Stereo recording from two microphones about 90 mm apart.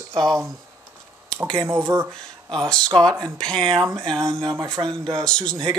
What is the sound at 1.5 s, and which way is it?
Speech, 25° right (ahead or behind).